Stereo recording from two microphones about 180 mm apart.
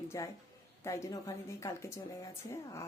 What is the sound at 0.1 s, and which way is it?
Speech, 15° left (ahead or behind).